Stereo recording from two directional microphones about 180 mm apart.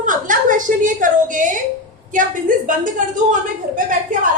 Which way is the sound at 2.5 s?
50° right (ahead or behind).